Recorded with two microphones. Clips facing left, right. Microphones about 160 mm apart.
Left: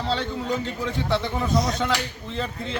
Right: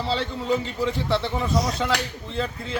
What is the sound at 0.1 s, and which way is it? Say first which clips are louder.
A man's voice: right 2 dB; centre (ahead or behind).